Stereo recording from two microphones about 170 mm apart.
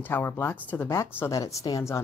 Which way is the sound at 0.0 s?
10° left (ahead or behind).